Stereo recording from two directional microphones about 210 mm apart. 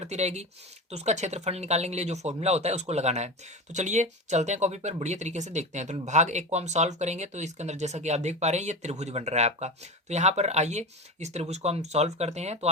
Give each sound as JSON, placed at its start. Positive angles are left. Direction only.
{"t": 0.0, "sound": "speech", "side_deg": -30}